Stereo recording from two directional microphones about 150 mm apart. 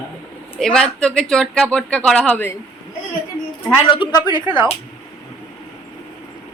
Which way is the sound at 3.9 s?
30° left (ahead or behind).